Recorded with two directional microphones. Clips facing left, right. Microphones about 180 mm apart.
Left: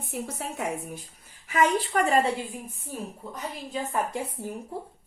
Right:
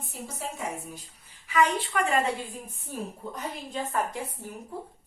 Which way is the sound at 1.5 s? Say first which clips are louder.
Left 1 dB; 40° left (ahead or behind).